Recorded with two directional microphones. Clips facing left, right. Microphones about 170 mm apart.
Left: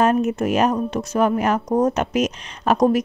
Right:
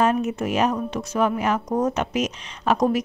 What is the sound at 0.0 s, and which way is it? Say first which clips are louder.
A woman's voice: left 3 dB; 50° left (ahead or behind).